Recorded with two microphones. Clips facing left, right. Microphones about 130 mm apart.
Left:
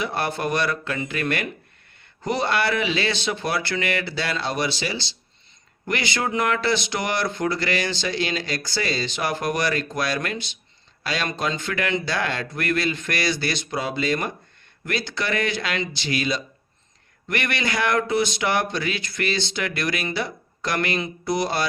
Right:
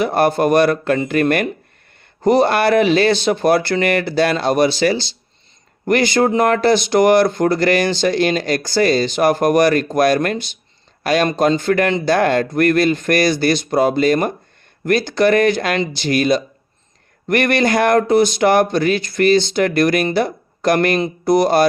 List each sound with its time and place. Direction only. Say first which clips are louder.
0.0 s speech: right 10 dB; 45° right (ahead or behind)